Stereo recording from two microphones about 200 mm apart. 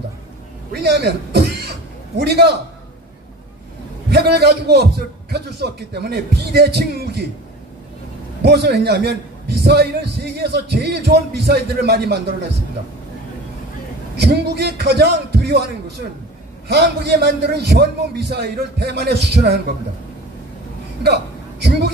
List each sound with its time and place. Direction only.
0.7 s a man's voice: 55° right (ahead or behind)
4.1 s a man's voice: 55° right (ahead or behind)
8.4 s a man's voice: 55° right (ahead or behind)
14.1 s a man's voice: 55° right (ahead or behind)
16.6 s a man's voice: 55° right (ahead or behind)
21.0 s a man's voice: 55° right (ahead or behind)